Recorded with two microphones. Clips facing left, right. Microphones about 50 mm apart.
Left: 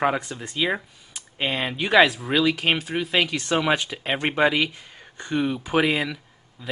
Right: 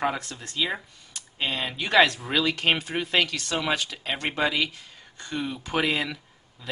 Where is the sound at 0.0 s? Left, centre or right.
Centre.